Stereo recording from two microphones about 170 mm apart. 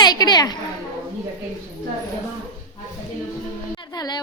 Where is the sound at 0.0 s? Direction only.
25° left (ahead or behind).